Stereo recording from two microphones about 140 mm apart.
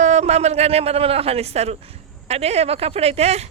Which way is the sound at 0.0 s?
55° right (ahead or behind).